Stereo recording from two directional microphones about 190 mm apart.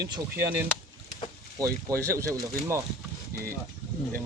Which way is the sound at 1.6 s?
15° right (ahead or behind).